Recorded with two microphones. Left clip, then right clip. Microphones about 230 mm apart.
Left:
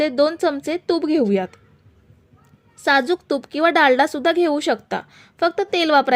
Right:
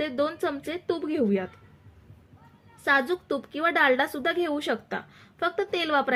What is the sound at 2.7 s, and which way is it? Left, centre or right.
A woman's voice, left.